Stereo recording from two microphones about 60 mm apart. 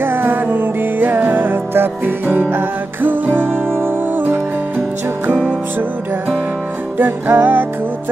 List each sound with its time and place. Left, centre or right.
0.0 s music: right
7.0 s music: right